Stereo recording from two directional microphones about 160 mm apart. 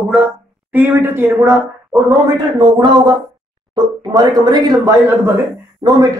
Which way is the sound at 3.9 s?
25° right (ahead or behind).